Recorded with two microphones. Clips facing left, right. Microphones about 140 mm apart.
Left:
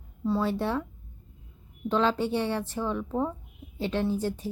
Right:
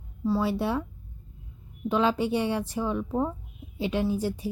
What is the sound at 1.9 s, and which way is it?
A woman's voice, 10° right (ahead or behind).